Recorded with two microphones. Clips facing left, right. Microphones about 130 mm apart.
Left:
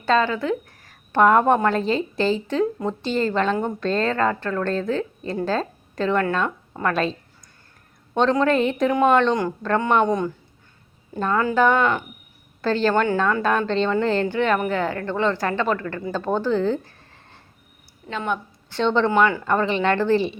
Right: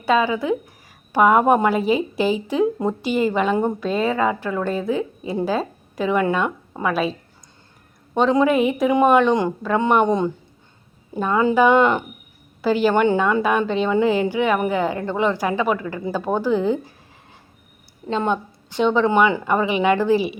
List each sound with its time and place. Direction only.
0.0 s a woman's voice: 10° right (ahead or behind)
10.1 s speech: 20° right (ahead or behind)
11.2 s a woman's voice: 10° right (ahead or behind)
11.7 s speech: 25° right (ahead or behind)
12.6 s a woman's voice: 10° right (ahead or behind)
18.1 s speech: 25° right (ahead or behind)
18.7 s a woman's voice: 10° right (ahead or behind)